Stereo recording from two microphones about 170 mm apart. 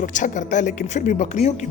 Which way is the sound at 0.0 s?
50° left (ahead or behind).